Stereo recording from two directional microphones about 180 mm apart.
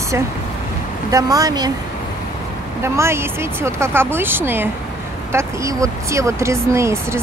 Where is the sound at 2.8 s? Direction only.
15° right (ahead or behind).